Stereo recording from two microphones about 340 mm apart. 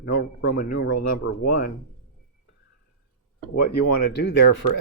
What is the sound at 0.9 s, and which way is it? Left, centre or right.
Speech, left.